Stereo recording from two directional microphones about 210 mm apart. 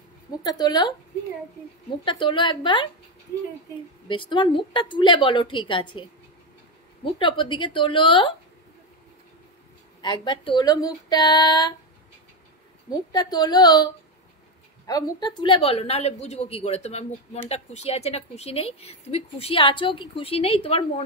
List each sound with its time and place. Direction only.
0.4 s speech: 20° left (ahead or behind)
2.0 s speech: 20° left (ahead or behind)
4.1 s speech: 25° left (ahead or behind)
7.2 s speech: 20° left (ahead or behind)
10.0 s speech: 20° left (ahead or behind)
13.1 s speech: 20° left (ahead or behind)
14.9 s speech: 15° left (ahead or behind)